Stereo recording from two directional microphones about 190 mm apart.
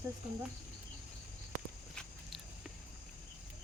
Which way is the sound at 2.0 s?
Centre (ahead or behind).